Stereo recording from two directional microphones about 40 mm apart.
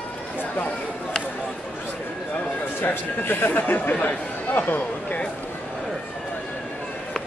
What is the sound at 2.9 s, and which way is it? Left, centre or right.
Speech, left.